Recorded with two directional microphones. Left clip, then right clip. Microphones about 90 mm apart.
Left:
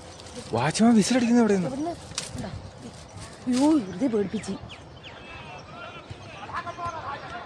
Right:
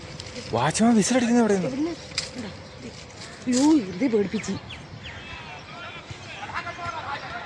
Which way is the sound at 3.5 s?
40° left (ahead or behind).